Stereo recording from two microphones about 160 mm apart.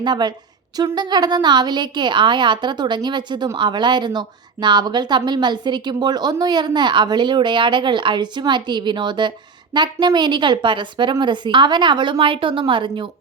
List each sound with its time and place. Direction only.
0.0 s a woman's voice: 25° right (ahead or behind)